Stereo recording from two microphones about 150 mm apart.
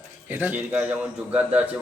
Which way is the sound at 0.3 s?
10° right (ahead or behind).